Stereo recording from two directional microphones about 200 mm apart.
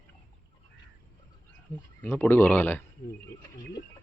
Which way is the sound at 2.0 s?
10° left (ahead or behind).